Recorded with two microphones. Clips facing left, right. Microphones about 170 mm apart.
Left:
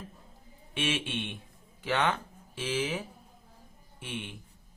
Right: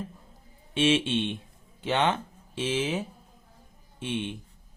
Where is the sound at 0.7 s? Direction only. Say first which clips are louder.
Right 9 dB; 30° right (ahead or behind).